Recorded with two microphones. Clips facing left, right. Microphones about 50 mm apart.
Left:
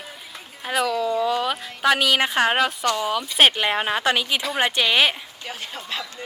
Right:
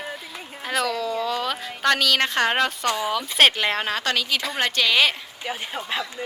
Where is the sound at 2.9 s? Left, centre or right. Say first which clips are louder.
Left 1 dB; centre.